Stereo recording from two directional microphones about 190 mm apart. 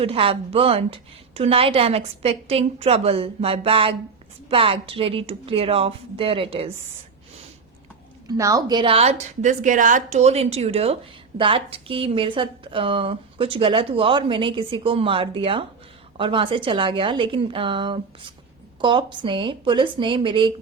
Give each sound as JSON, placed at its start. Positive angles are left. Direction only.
{"t": 0.0, "sound": "a woman's voice", "side_deg": -30}
{"t": 8.3, "sound": "a woman's voice", "side_deg": -20}